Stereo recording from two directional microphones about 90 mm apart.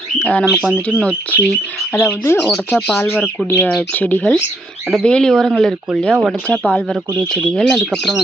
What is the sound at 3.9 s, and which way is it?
Speech, 20° left (ahead or behind).